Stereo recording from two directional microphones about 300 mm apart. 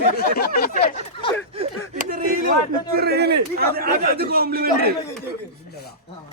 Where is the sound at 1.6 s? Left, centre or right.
Centre.